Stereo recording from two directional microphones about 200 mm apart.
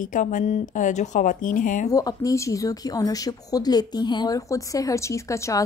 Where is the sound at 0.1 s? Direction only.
40° left (ahead or behind).